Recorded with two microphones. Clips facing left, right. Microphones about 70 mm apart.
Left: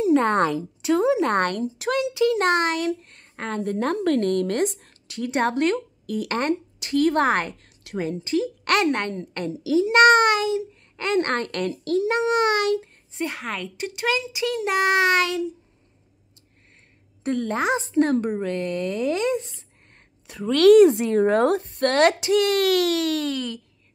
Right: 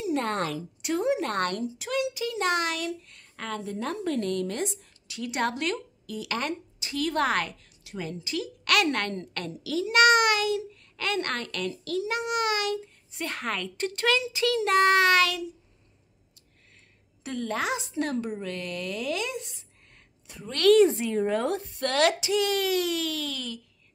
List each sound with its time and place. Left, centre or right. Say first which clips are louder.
1.3 s a woman's voice: left 6 dB; left
1.8 s speech: left 10 dB; left
3.6 s a woman's voice: left 9 dB; left
7.8 s a sound: left 8 dB; left
8.2 s a woman's voice: left 9 dB; left
8.8 s a child's voice: left 5 dB; centre
11.1 s a woman's voice: left 8 dB; left
13.3 s a child's voice: left 1 dB; centre; by 15.4 s left
17.2 s a sound: left 8 dB; left
17.5 s a woman's voice: left 3 dB; left
20.2 s a woman's voice: left 7 dB; left